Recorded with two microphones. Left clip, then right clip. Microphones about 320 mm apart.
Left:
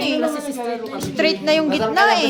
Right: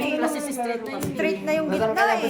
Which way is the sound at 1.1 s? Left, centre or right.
Left.